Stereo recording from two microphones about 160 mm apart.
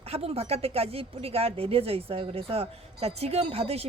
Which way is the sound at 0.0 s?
40° right (ahead or behind).